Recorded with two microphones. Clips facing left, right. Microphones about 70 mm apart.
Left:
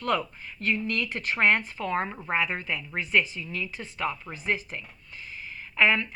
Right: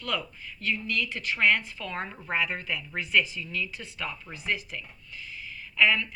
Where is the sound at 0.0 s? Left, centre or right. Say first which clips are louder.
Left 5 dB; left.